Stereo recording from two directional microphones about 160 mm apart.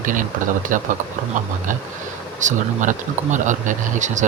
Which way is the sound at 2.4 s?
50° right (ahead or behind).